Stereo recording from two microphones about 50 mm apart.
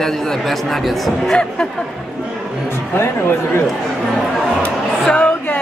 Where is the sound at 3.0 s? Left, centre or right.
Left.